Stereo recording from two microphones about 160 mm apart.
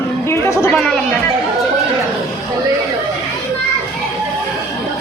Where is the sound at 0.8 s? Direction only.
Centre (ahead or behind).